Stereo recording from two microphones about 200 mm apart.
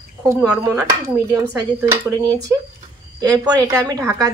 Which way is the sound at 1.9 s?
20° right (ahead or behind).